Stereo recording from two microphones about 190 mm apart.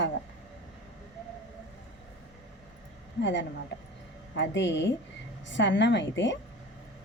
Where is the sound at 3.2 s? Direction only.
70° left (ahead or behind).